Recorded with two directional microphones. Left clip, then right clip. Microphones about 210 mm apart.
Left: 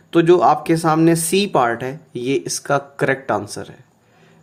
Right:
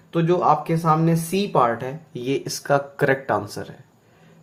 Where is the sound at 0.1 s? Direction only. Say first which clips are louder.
Left 6 dB; 45° left (ahead or behind); by 3.8 s 15° left (ahead or behind).